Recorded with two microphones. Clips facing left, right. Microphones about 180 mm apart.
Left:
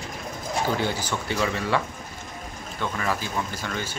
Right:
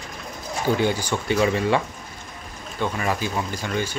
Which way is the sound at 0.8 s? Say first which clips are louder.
Right 4 dB; 15° right (ahead or behind).